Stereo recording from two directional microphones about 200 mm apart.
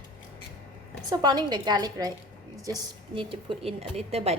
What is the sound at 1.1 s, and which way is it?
A woman's voice, 20° right (ahead or behind).